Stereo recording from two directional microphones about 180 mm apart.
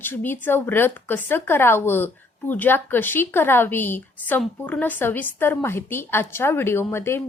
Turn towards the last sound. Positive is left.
turn(degrees=15)  # may be behind; listen again after turning